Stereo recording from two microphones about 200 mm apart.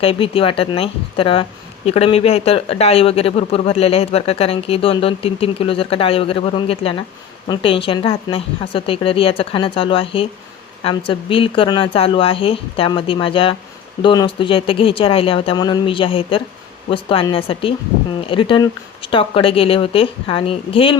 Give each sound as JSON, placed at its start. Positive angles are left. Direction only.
{"t": 0.0, "sound": "a woman's voice", "side_deg": 25}